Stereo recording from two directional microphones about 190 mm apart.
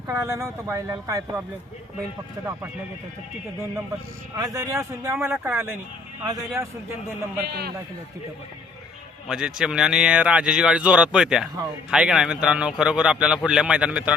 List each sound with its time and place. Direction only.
0.1 s speech: 15° right (ahead or behind)
4.4 s speech: 15° right (ahead or behind)
7.4 s a man's voice: 55° right (ahead or behind)
9.2 s speech: 5° right (ahead or behind)